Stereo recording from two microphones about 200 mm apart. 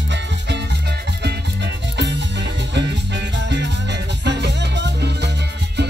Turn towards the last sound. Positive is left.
turn(degrees=-60)  # may be behind; listen again after turning